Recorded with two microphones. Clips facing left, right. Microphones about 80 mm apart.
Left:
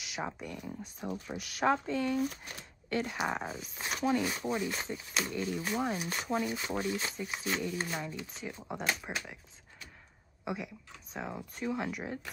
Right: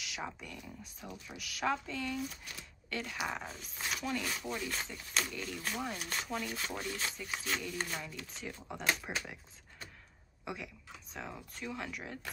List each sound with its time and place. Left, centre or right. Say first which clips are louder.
0.0 s speech: left 4 dB; left
3.4 s speech: left 3 dB; centre
3.9 s speech: left 7 dB; left; by 5.3 s centre
5.3 s speech: left 6 dB; left
8.0 s speech: left 5 dB; left
8.3 s speech: left 3 dB; centre
10.4 s speech: left 5 dB; centre